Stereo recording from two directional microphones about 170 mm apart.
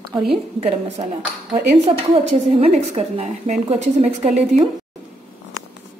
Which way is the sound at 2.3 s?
40° right (ahead or behind).